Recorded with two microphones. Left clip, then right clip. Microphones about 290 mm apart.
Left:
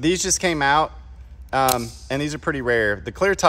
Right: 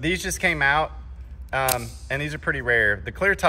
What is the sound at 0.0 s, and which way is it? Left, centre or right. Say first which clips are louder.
Speech: left 3 dB; centre.